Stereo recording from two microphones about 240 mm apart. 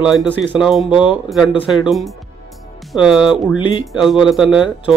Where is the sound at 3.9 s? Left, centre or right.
Centre.